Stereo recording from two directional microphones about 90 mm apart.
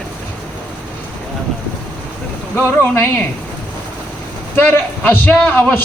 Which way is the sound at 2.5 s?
25° left (ahead or behind).